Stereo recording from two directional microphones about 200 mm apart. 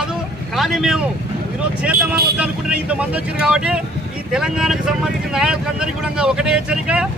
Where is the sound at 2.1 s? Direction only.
50° right (ahead or behind).